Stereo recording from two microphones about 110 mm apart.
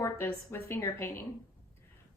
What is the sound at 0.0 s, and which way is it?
A woman's voice, 25° left (ahead or behind).